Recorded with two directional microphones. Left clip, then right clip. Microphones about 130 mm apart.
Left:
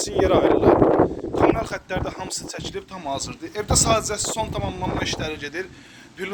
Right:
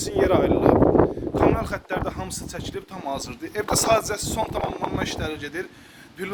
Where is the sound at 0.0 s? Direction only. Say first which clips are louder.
Left 2 dB; 55° right (ahead or behind).